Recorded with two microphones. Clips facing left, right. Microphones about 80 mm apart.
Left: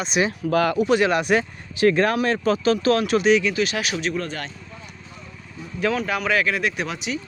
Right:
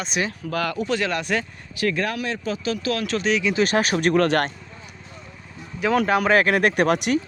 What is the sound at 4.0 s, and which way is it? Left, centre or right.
Speech, right.